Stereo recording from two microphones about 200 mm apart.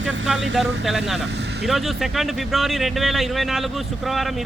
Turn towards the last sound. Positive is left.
turn(degrees=0)  # may be behind; listen again after turning